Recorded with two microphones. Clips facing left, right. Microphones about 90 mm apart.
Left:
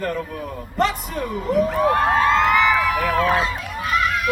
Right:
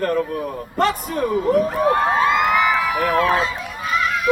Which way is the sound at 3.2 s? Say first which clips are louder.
Right 1 dB; 5° left (ahead or behind).